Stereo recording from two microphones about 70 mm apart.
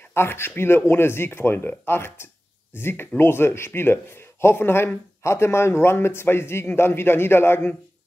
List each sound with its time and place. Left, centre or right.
0.1 s speech: left